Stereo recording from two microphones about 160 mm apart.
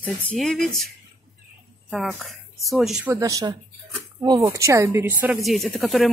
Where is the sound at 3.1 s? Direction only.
20° right (ahead or behind).